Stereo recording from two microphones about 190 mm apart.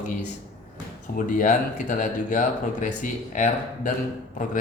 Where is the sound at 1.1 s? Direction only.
45° left (ahead or behind).